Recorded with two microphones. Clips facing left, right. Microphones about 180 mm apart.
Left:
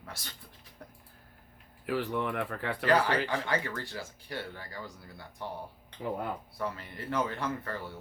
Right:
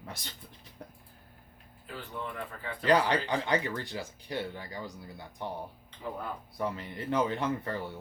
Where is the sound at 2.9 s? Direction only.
20° right (ahead or behind).